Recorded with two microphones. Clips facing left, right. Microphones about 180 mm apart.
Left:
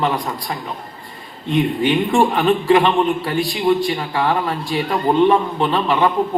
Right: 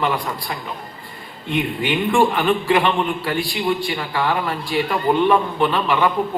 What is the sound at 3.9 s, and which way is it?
A man's voice, 35° left (ahead or behind).